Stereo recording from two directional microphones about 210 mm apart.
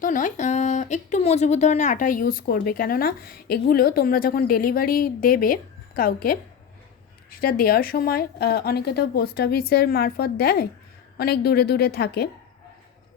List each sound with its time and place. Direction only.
0.0 s speech: 40° left (ahead or behind)